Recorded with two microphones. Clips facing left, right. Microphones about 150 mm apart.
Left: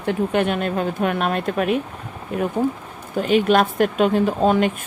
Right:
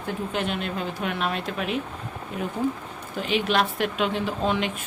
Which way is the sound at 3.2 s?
45° left (ahead or behind).